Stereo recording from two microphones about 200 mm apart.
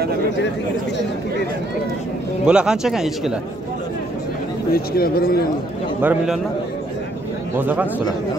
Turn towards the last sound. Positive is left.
turn(degrees=-10)  # may be behind; listen again after turning